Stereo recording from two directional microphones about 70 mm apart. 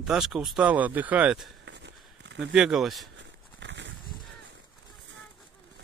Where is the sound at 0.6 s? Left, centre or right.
Right.